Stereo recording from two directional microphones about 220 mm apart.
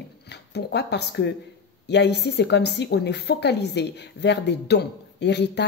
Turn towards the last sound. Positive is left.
turn(degrees=50)  # may be behind; listen again after turning